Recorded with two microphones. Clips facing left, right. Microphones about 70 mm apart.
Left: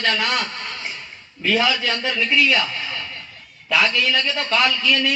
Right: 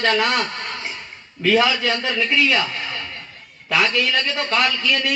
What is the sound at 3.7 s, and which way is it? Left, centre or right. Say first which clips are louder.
Speech: even; right.